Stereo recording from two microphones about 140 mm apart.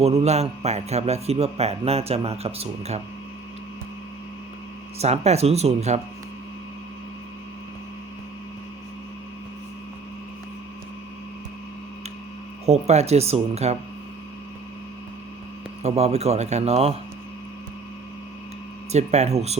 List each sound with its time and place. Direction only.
0.0 s a man's voice: 50° right (ahead or behind)
4.9 s a man's voice: 50° right (ahead or behind)
12.6 s a man's voice: 50° right (ahead or behind)
15.8 s a man's voice: 50° right (ahead or behind)
18.9 s a man's voice: 50° right (ahead or behind)